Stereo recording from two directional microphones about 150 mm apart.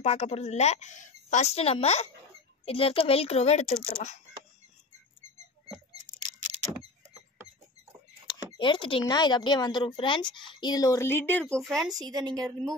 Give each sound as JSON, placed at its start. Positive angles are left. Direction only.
{"t": 0.0, "sound": "a woman's voice", "side_deg": 45}
{"t": 6.0, "sound": "vehicle", "side_deg": -55}
{"t": 8.3, "sound": "speech", "side_deg": 30}
{"t": 11.5, "sound": "speech", "side_deg": 0}
{"t": 12.0, "sound": "a woman's voice", "side_deg": -25}